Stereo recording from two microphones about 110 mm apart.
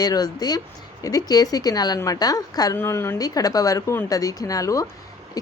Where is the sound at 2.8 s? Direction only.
25° left (ahead or behind).